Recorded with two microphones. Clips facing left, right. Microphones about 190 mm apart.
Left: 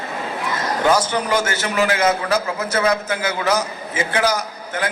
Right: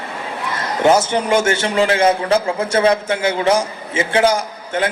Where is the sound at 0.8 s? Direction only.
25° right (ahead or behind).